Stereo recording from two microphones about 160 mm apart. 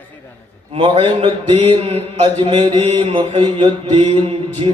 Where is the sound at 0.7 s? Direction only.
35° right (ahead or behind).